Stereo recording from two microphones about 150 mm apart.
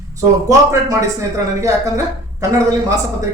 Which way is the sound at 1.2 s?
20° right (ahead or behind).